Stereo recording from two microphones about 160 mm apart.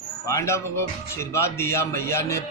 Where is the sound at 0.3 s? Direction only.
15° left (ahead or behind).